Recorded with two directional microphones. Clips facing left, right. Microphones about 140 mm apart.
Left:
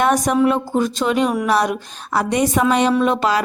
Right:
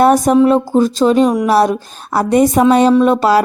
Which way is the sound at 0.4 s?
35° right (ahead or behind).